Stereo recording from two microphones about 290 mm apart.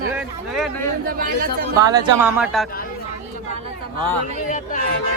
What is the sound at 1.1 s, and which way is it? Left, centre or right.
Speech, right.